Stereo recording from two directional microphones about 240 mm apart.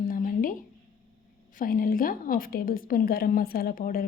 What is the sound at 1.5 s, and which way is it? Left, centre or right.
A woman's voice, left.